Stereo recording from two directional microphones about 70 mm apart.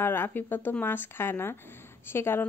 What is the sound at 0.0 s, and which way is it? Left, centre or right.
Speech, left.